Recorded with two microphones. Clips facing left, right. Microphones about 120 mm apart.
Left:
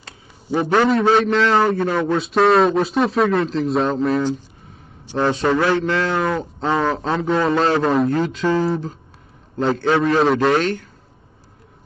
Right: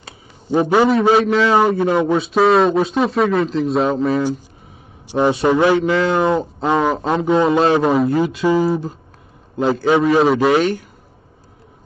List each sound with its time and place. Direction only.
0.5 s a man's voice: 15° right (ahead or behind)
2.1 s speech: centre (ahead or behind)
5.0 s a man's voice: 10° right (ahead or behind)